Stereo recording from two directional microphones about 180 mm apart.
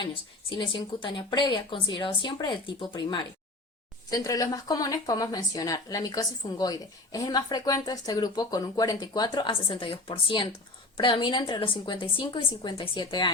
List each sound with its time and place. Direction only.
0.0 s speech: 25° left (ahead or behind)